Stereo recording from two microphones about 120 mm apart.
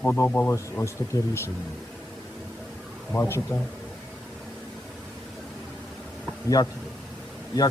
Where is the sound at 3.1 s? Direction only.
20° left (ahead or behind).